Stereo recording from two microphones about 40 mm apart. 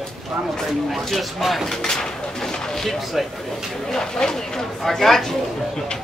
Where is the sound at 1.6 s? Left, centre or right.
Centre.